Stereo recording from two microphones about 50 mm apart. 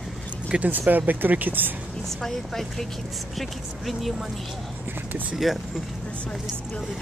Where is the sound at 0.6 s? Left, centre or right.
Right.